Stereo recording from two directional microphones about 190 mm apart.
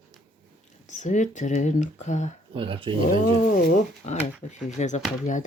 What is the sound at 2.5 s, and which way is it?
Speech, 30° right (ahead or behind).